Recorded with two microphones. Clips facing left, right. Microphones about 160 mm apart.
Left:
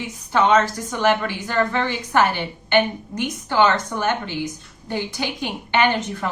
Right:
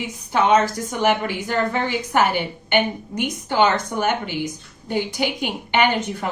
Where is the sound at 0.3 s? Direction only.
10° right (ahead or behind).